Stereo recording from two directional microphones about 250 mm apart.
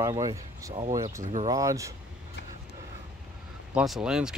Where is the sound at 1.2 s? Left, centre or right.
Right.